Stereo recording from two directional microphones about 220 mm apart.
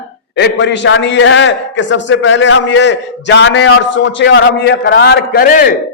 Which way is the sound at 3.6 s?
65° left (ahead or behind).